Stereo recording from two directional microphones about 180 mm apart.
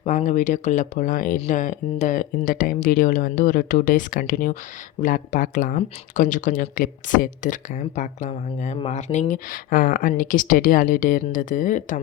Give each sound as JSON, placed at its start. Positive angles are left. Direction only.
{"t": 0.0, "sound": "speech", "side_deg": 40}